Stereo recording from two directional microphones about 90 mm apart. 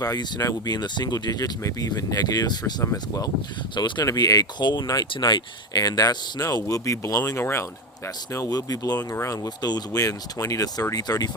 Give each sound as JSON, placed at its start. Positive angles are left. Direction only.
{"t": 0.0, "sound": "speech", "side_deg": 40}
{"t": 3.8, "sound": "speech", "side_deg": 55}
{"t": 4.0, "sound": "speech", "side_deg": 40}
{"t": 8.4, "sound": "speech", "side_deg": 45}